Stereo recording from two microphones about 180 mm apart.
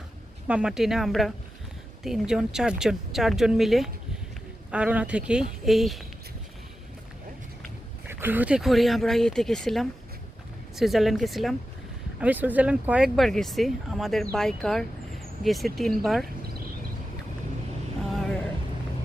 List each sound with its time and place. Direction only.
0.4 s speech: 5° right (ahead or behind)
8.0 s speech: 10° right (ahead or behind)